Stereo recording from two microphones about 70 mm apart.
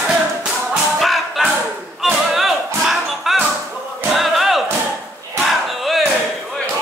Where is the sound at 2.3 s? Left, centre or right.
Centre.